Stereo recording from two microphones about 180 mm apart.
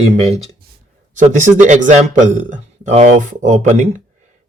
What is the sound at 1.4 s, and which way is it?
Speech, 45° right (ahead or behind).